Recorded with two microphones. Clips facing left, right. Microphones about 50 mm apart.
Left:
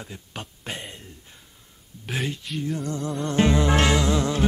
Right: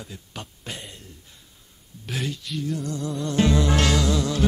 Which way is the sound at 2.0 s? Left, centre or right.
Left.